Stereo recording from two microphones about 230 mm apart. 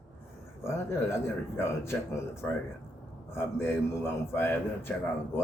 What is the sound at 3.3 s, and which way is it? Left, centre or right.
A man's voice, centre.